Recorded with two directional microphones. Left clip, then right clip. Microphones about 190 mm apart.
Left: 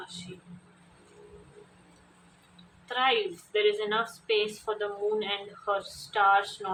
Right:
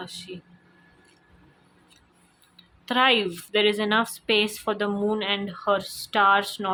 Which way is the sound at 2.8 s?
50° right (ahead or behind).